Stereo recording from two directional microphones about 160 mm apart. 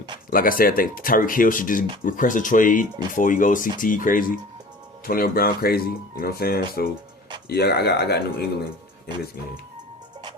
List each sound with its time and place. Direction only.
0.3 s speech: 60° left (ahead or behind)
7.4 s speech: 90° left